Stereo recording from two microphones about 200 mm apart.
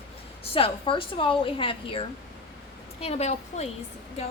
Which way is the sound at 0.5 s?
25° left (ahead or behind).